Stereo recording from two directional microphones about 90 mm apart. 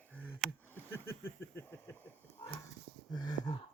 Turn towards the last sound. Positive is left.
turn(degrees=50)  # may be behind; listen again after turning